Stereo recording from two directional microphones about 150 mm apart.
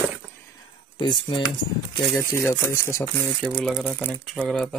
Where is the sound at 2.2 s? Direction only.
20° left (ahead or behind).